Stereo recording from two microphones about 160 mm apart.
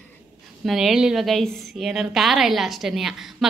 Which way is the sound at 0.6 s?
Centre (ahead or behind).